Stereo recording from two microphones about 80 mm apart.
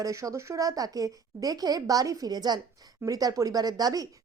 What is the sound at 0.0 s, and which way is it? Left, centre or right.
Speech, right.